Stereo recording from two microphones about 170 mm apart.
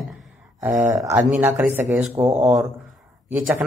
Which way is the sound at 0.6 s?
20° right (ahead or behind).